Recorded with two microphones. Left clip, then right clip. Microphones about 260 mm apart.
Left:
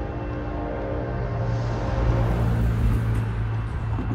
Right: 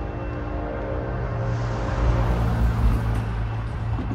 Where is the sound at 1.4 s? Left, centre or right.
Right.